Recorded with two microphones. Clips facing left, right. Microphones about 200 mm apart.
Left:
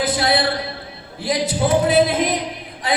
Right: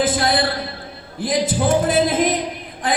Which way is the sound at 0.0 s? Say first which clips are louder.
Even; 50° right (ahead or behind).